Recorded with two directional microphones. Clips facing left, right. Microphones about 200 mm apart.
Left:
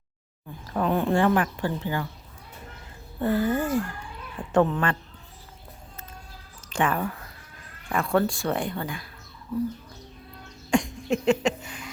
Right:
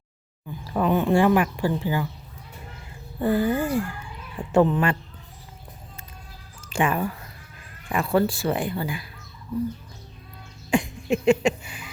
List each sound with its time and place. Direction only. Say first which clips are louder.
0.7 s speech: right 3 dB; 5° right (ahead or behind)
3.2 s speech: right 2 dB; 10° right (ahead or behind)
6.7 s a woman's voice: right 2 dB; 10° right (ahead or behind)
10.7 s cough: right 1 dB; 5° right (ahead or behind)